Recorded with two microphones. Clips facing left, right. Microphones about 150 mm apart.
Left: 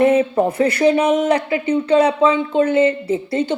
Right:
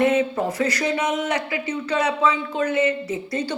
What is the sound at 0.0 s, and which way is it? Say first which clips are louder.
Speech: left 5 dB; 30° left (ahead or behind).